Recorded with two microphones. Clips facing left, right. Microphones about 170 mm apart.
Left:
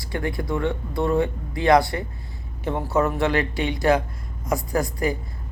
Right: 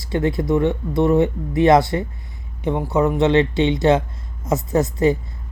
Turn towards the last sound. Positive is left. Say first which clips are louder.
# right 6 dB
turn(degrees=-25)  # may be behind; listen again after turning